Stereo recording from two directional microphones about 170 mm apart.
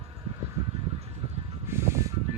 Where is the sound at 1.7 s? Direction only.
15° right (ahead or behind).